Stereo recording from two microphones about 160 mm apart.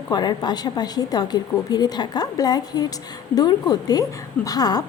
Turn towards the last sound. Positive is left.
turn(degrees=25)  # may be behind; listen again after turning